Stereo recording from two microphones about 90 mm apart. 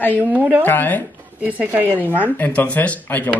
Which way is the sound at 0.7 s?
20° left (ahead or behind).